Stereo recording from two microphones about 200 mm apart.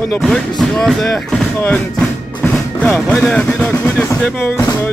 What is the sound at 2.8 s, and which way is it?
Speech, 5° left (ahead or behind).